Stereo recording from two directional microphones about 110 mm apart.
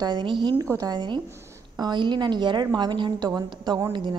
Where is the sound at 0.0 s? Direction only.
40° right (ahead or behind).